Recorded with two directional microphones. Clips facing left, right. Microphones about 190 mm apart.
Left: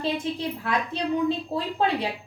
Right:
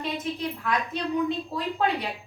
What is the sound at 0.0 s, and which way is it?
A woman's voice, 30° left (ahead or behind).